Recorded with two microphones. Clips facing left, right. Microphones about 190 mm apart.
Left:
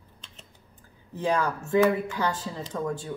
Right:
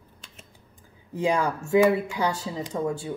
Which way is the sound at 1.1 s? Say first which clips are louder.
Right 2 dB; 10° right (ahead or behind).